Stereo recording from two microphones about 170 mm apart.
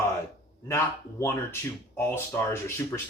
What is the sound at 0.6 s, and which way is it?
Speech, 15° left (ahead or behind).